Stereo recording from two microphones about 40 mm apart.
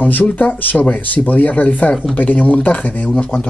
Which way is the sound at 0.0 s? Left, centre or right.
Left.